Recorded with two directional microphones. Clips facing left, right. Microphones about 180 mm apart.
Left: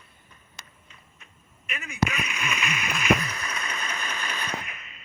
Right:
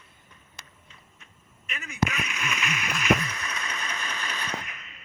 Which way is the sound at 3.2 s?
35° left (ahead or behind).